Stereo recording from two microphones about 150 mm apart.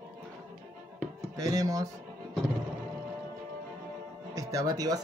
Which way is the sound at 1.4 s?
25° right (ahead or behind).